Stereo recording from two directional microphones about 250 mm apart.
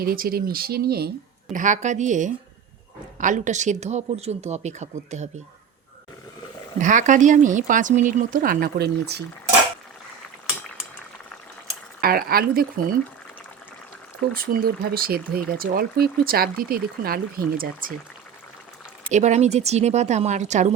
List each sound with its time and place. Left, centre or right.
0.0 s speech: right
6.7 s speech: right
12.0 s speech: right
14.3 s speech: right
19.1 s speech: right